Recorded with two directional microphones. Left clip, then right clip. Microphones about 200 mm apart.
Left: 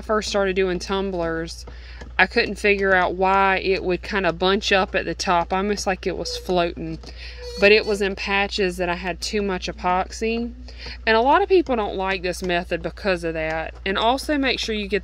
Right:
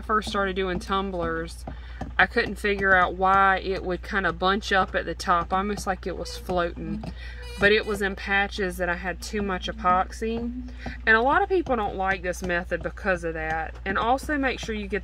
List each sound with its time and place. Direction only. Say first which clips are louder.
0.1 s speech: left 4 dB; 35° left (ahead or behind); by 15.0 s 50° left (ahead or behind)